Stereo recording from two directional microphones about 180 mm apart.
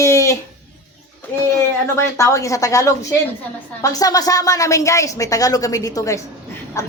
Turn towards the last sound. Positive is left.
turn(degrees=20)  # may be behind; listen again after turning